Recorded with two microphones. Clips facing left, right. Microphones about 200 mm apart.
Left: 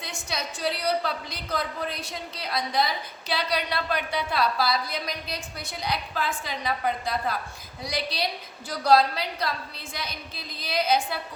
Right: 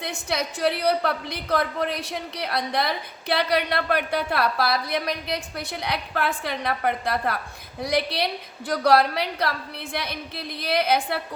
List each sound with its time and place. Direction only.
0.0 s a woman's voice: 65° right (ahead or behind)